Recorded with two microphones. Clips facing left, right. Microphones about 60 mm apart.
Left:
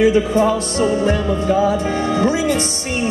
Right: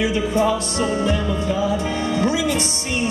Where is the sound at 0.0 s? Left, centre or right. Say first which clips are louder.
Left 5 dB; left.